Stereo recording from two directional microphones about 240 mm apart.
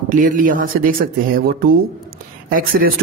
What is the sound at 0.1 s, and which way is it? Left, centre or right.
A man's voice, right.